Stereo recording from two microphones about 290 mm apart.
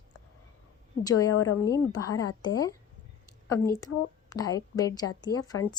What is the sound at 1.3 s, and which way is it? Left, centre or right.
Speech, left.